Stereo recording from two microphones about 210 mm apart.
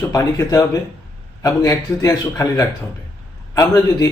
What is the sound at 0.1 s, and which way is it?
A man's voice, 15° left (ahead or behind).